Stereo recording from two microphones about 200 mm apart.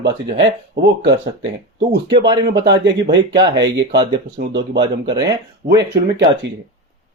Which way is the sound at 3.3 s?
20° right (ahead or behind).